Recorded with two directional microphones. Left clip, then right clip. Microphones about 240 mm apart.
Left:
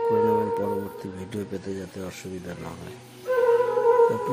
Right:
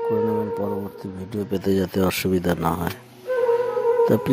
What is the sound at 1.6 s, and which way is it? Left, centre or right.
Speech, right.